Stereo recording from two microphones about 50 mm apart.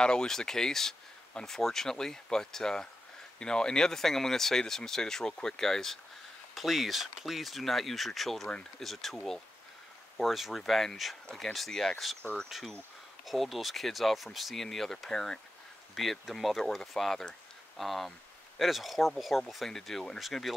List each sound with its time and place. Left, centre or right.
0.0 s speech: centre
6.5 s speech: centre
15.9 s speech: centre